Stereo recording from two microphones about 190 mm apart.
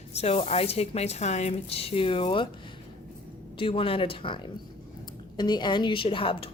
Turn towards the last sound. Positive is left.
turn(degrees=30)  # may be behind; listen again after turning